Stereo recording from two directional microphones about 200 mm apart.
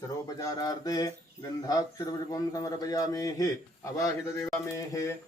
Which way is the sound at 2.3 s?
20° left (ahead or behind).